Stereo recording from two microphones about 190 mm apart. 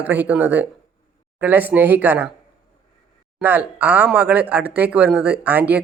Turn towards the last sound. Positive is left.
turn(degrees=-10)  # may be behind; listen again after turning